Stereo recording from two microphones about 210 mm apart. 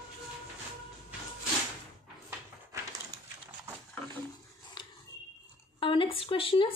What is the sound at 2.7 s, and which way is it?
Crushing, 15° right (ahead or behind).